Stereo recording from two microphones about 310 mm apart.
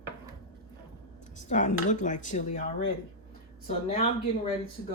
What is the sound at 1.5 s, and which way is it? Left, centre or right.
Speech, left.